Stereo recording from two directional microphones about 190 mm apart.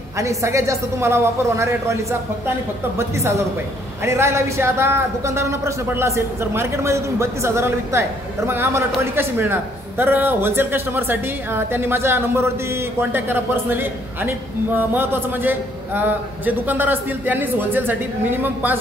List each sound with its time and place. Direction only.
0.2 s speech: 15° right (ahead or behind)